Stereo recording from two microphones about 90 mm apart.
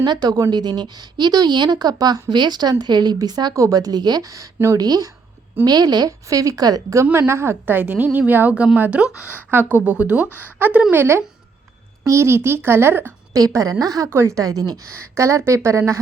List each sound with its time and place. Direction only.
0.0 s speech: 50° right (ahead or behind)
2.3 s speech: 50° right (ahead or behind)
7.0 s a woman's voice: 30° right (ahead or behind)
13.3 s a woman's voice: 40° right (ahead or behind)